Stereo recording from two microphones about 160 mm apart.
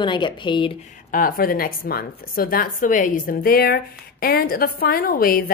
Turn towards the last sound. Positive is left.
turn(degrees=65)  # may be behind; listen again after turning